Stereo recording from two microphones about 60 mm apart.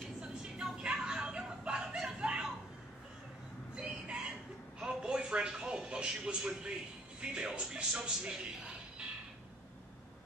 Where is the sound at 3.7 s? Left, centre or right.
Centre.